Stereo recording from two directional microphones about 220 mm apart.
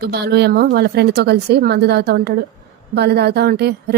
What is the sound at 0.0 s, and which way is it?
Speech, 45° right (ahead or behind).